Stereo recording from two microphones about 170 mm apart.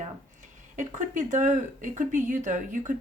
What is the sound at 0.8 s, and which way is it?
Speech, 50° right (ahead or behind).